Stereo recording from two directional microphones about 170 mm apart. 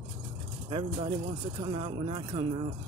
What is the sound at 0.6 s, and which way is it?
Speech, 30° right (ahead or behind).